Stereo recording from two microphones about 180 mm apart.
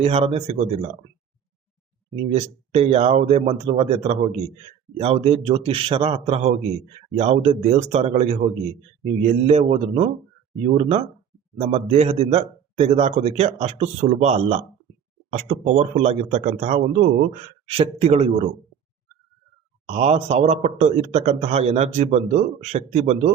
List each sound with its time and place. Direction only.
0.0 s a man's voice: 35° right (ahead or behind)
2.3 s a man's voice: 35° right (ahead or behind)
19.9 s a man's voice: 35° right (ahead or behind)